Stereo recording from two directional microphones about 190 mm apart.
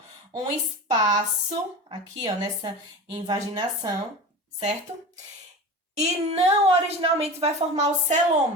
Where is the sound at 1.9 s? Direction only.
25° right (ahead or behind).